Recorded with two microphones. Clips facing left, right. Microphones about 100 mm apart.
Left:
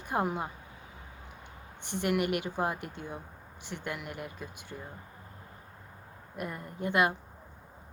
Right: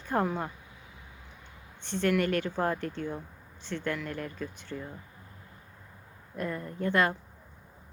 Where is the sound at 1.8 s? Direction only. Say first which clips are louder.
Right 2 dB; 15° left (ahead or behind).